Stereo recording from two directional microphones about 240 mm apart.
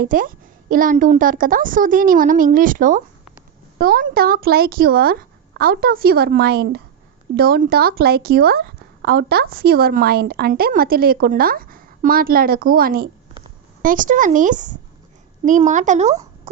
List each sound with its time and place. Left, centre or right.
0.0 s speech: right